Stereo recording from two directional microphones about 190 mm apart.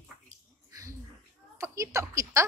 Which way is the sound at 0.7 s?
15° right (ahead or behind).